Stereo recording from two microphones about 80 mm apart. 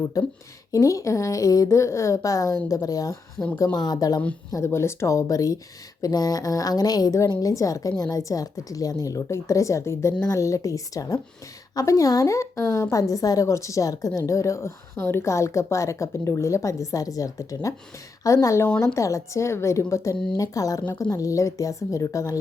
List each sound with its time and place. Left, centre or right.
0.1 s a woman's voice: left
3.7 s a woman's voice: left
4.5 s a woman's voice: left
20.3 s a woman's voice: left